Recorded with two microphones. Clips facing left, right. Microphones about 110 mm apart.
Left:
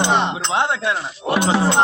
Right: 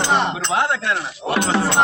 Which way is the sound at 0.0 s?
20° left (ahead or behind).